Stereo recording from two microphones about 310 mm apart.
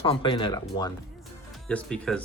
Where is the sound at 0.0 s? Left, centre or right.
Centre.